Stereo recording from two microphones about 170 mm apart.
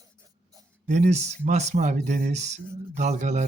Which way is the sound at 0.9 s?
45° right (ahead or behind).